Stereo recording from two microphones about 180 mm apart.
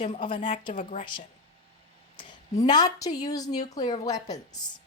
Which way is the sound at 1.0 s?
25° left (ahead or behind).